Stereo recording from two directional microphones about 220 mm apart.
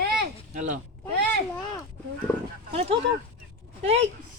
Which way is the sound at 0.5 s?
35° right (ahead or behind).